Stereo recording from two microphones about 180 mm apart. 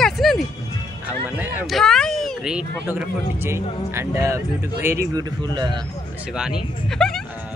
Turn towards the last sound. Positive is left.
turn(degrees=0)  # may be behind; listen again after turning